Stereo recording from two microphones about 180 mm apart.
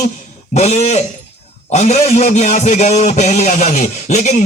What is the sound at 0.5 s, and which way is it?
A man's voice, 40° left (ahead or behind).